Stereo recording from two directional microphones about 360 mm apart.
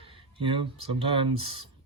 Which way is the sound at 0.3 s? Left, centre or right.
Centre.